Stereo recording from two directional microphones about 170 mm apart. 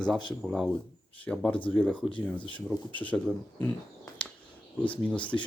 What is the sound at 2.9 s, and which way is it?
Speech, 10° left (ahead or behind).